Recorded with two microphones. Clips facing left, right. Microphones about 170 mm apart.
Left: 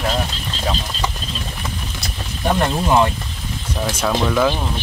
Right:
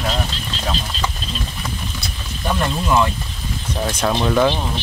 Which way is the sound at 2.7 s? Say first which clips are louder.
Left 1 dB; 30° left (ahead or behind).